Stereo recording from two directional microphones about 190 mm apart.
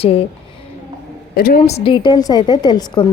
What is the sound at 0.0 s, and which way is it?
Speech, 30° left (ahead or behind).